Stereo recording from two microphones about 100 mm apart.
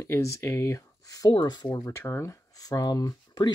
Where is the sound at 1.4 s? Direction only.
45° left (ahead or behind).